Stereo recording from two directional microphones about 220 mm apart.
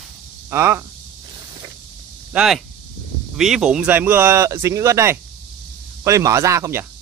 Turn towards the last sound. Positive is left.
turn(degrees=-10)  # may be behind; listen again after turning